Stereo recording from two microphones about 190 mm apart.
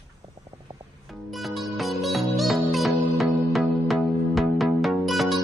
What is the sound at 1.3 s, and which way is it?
Music, centre (ahead or behind).